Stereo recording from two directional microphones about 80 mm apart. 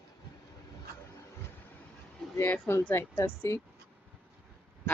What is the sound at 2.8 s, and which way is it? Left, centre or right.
Speech, left.